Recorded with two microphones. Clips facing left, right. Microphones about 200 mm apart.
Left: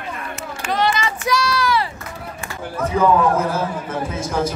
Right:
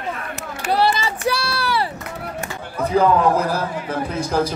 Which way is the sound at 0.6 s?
35° right (ahead or behind).